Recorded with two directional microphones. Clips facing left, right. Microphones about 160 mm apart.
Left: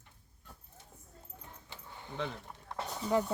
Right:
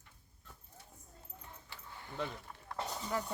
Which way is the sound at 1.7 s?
20° left (ahead or behind).